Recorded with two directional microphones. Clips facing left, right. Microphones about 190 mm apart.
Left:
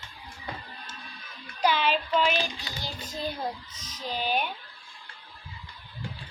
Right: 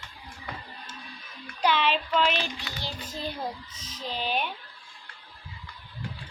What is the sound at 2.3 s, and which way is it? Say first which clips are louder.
Child singing: left 1 dB; 40° left (ahead or behind).